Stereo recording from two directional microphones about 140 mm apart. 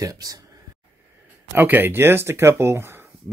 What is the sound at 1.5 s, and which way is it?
Speech, 15° right (ahead or behind).